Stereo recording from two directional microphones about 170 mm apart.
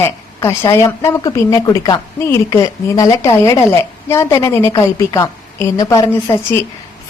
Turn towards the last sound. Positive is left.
turn(degrees=20)  # may be behind; listen again after turning